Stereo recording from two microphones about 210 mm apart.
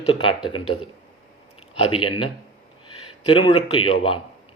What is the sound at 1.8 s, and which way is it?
A man's voice, 25° left (ahead or behind).